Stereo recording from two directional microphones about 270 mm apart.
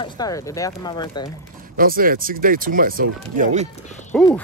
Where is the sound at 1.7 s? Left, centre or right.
Right.